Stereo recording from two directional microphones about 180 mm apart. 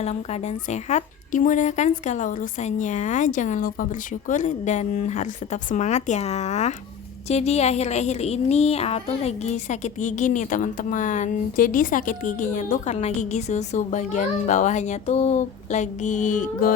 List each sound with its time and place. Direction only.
0.0 s a woman's voice: 40° left (ahead or behind)